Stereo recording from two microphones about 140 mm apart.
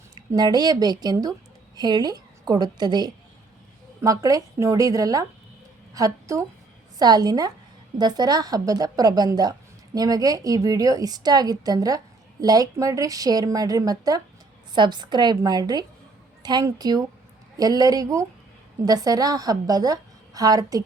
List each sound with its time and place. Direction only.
0.3 s a woman's voice: 30° right (ahead or behind)